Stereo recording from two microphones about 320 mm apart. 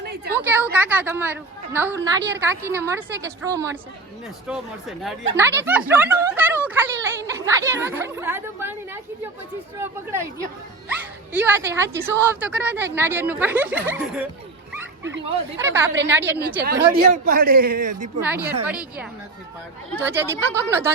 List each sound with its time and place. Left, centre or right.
0.0 s a sound: right
0.3 s a woman's voice: centre
15.5 s a woman's voice: centre
16.4 s a man's voice: right
18.2 s a woman's voice: centre